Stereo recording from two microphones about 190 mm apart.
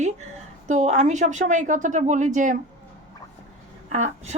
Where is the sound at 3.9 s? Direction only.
35° right (ahead or behind).